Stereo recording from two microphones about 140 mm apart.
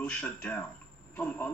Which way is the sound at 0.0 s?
10° left (ahead or behind).